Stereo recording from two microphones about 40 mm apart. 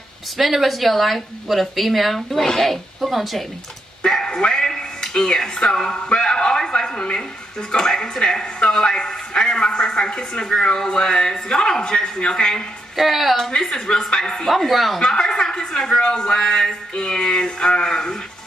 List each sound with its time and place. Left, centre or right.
0.4 s a woman's voice: centre
4.0 s a man's voice: centre
12.9 s a woman's voice: centre
13.5 s a woman's voice: centre
14.7 s a woman's voice: centre
15.0 s a woman's voice: centre